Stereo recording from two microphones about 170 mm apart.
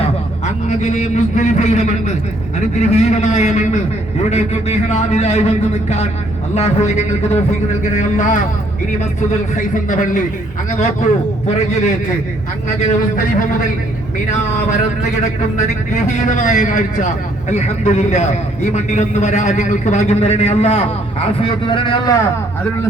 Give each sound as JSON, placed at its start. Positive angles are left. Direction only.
{"t": 0.8, "sound": "a man's voice", "side_deg": 45}
{"t": 9.6, "sound": "a man's voice", "side_deg": 50}
{"t": 15.2, "sound": "a man's voice", "side_deg": 45}
{"t": 21.4, "sound": "a man's voice", "side_deg": 25}